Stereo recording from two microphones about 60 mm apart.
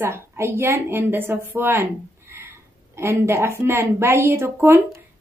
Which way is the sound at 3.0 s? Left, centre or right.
Right.